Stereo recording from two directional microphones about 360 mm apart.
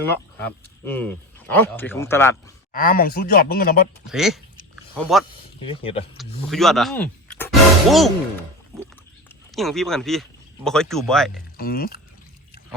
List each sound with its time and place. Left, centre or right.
0.4 s speech: centre
2.7 s speech: left
4.0 s speech: centre
5.3 s speech: centre
6.1 s speech: centre
9.6 s speech: centre
11.5 s speech: left